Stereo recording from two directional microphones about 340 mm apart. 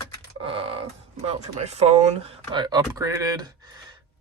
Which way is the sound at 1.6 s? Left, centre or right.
Centre.